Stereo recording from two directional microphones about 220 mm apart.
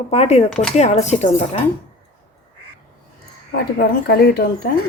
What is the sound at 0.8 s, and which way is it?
Speech, 30° left (ahead or behind).